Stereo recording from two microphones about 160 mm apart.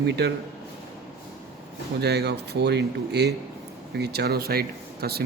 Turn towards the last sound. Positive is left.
turn(degrees=-75)  # may be behind; listen again after turning